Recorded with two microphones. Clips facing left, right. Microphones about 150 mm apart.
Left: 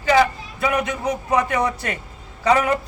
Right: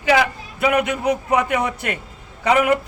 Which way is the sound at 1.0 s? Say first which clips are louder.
Right 2 dB; 10° right (ahead or behind).